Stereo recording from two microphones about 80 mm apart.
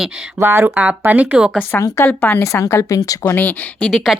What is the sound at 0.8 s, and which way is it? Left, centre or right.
Speech, centre.